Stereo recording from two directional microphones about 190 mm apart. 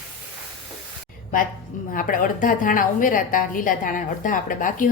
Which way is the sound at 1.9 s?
45° left (ahead or behind).